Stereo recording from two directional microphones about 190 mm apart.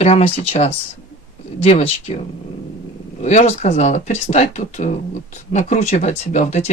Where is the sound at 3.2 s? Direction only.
35° left (ahead or behind).